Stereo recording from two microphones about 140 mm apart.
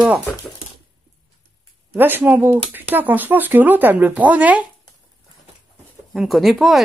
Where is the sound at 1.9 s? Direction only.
15° right (ahead or behind).